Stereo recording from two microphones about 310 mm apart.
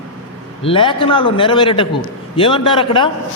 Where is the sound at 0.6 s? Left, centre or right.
Centre.